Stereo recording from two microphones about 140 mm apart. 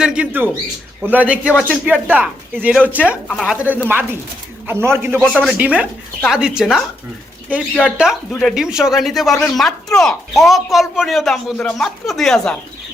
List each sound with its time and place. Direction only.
0.0 s speech: 5° right (ahead or behind)
3.2 s speech: centre (ahead or behind)
3.6 s speech: 10° right (ahead or behind)
5.2 s speech: 5° left (ahead or behind)
5.5 s speech: 10° right (ahead or behind)
7.9 s speech: 5° right (ahead or behind)